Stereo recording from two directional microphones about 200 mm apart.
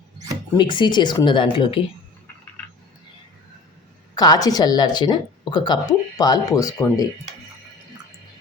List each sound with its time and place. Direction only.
0.5 s speech: 25° left (ahead or behind)
4.1 s speech: 20° left (ahead or behind)